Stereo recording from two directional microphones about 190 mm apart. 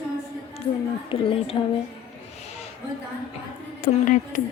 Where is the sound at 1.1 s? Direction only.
30° left (ahead or behind).